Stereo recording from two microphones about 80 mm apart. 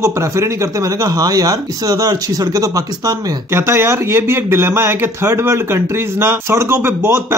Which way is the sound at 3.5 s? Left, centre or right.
Right.